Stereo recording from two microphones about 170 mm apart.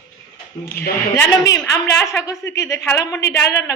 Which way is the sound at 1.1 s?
20° left (ahead or behind).